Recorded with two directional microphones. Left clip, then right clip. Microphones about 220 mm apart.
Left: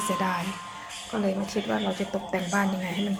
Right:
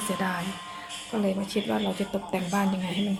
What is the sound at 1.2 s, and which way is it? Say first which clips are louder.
Speech: even; 20° right (ahead or behind).